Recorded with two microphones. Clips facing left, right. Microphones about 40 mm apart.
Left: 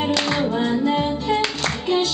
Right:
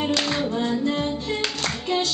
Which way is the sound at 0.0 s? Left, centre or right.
Centre.